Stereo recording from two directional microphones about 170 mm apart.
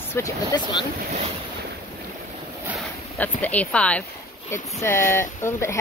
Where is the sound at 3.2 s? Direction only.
10° left (ahead or behind).